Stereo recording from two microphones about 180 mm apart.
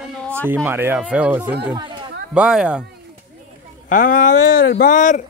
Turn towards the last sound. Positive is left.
turn(degrees=45)  # may be behind; listen again after turning